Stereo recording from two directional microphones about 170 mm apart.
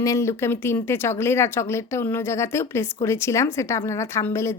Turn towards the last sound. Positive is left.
turn(degrees=15)  # may be behind; listen again after turning